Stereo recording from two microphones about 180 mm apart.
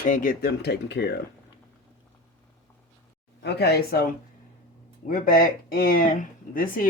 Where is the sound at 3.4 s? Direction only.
65° left (ahead or behind).